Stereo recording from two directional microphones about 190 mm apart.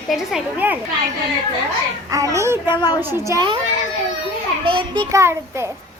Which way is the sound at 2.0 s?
15° right (ahead or behind).